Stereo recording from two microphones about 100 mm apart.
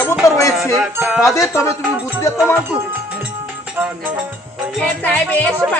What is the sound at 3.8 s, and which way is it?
Music, 15° right (ahead or behind).